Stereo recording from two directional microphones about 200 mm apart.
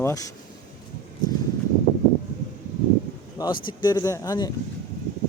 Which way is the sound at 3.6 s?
20° left (ahead or behind).